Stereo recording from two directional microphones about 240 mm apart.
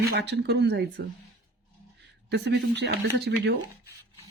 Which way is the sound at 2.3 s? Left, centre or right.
Right.